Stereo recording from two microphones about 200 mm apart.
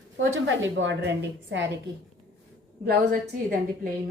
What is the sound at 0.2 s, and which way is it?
A woman's voice, 70° right (ahead or behind).